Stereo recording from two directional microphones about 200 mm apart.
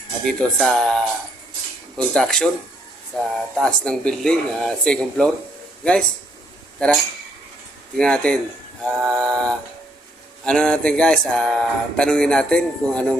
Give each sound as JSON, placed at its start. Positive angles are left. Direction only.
{"t": 0.3, "sound": "speech", "side_deg": 0}
{"t": 6.7, "sound": "speech", "side_deg": 5}